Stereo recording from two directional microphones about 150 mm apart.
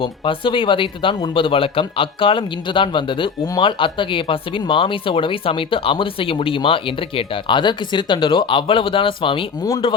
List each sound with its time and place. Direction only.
0.0 s speech: 35° left (ahead or behind)